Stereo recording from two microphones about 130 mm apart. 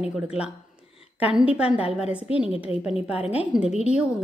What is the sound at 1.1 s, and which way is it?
A woman's voice, 10° right (ahead or behind).